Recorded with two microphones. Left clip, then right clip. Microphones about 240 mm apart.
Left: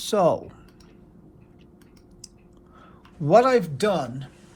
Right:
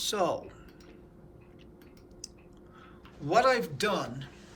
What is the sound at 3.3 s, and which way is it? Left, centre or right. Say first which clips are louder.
Speech: left 8 dB; centre.